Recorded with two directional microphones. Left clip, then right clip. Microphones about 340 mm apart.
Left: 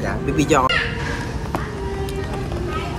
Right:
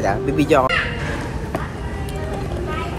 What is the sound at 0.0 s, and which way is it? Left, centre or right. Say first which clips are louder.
Speech: right 3 dB; centre.